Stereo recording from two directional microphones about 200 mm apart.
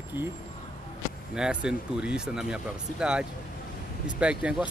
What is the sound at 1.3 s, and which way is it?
Speech, 5° right (ahead or behind).